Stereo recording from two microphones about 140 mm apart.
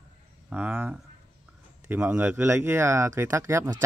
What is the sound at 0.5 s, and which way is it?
Speech, 10° right (ahead or behind).